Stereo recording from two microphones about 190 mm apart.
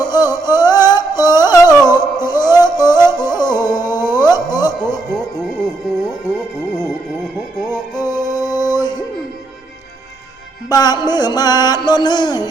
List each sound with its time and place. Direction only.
0.0 s music: 20° left (ahead or behind)
7.7 s music: 20° left (ahead or behind)
10.7 s music: 20° left (ahead or behind)